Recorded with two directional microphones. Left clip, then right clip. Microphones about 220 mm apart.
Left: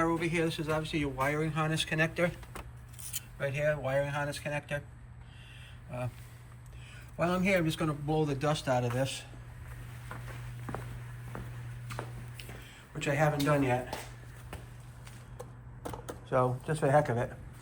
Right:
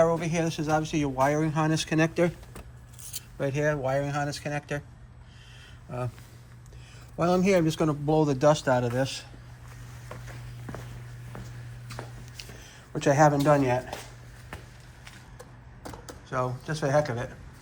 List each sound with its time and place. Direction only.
0.0 s speech: 15° right (ahead or behind)
3.4 s speech: 10° right (ahead or behind)
7.2 s speech: 10° right (ahead or behind)
13.0 s speech: 15° right (ahead or behind)
13.6 s speech: centre (ahead or behind)
15.4 s a sound: 45° left (ahead or behind)
16.3 s speech: 5° left (ahead or behind)